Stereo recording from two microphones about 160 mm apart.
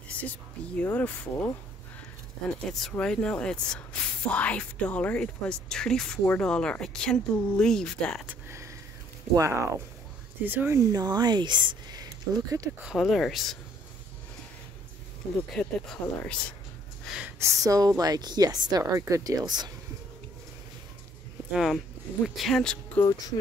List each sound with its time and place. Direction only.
0.1 s speech: 10° left (ahead or behind)
2.9 s speech: 5° left (ahead or behind)
8.3 s a sound: 15° right (ahead or behind)
9.3 s a woman's voice: 20° right (ahead or behind)
12.8 s speech: centre (ahead or behind)
15.5 s speech: 5° left (ahead or behind)
17.0 s a sound: centre (ahead or behind)
17.4 s a woman's voice: 20° right (ahead or behind)
21.5 s speech: 5° right (ahead or behind)
23.0 s speech: 25° left (ahead or behind)